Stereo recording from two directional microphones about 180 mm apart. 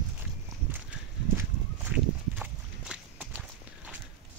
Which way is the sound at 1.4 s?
10° right (ahead or behind).